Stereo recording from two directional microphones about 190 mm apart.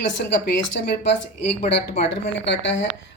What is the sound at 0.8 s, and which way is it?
Speech, 60° left (ahead or behind).